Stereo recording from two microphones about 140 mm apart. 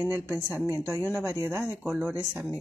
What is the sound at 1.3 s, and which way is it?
Speech, 5° right (ahead or behind).